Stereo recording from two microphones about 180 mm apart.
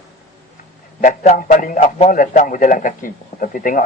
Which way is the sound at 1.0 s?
45° left (ahead or behind).